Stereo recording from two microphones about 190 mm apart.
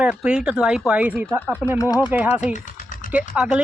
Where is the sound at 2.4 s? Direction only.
40° left (ahead or behind).